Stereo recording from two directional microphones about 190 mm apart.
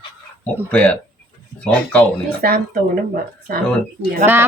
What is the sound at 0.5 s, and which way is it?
Speech, 5° left (ahead or behind).